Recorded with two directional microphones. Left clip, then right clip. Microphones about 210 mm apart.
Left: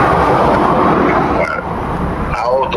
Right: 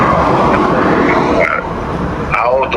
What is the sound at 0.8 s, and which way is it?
Frog, 25° right (ahead or behind).